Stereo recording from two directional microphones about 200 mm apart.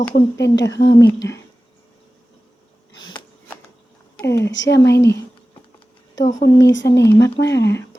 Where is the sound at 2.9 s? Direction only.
80° left.